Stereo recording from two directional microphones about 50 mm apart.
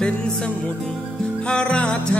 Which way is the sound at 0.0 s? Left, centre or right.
Centre.